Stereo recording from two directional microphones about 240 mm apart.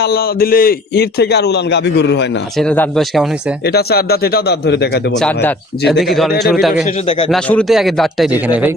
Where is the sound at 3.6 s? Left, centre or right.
Left.